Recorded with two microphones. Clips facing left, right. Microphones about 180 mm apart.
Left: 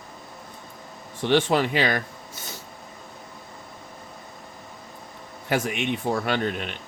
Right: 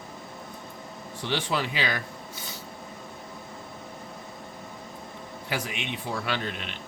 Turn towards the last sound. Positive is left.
turn(degrees=50)  # may be behind; listen again after turning